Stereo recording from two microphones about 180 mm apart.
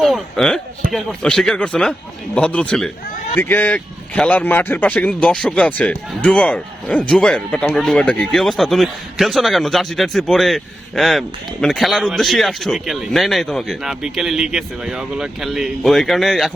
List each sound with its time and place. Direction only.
0.0 s a man's voice: centre (ahead or behind)